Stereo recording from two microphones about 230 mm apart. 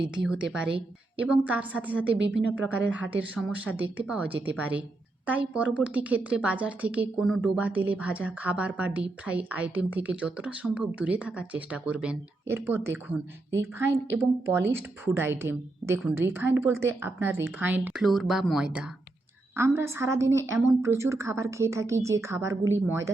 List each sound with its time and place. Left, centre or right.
0.2 s a woman's voice: centre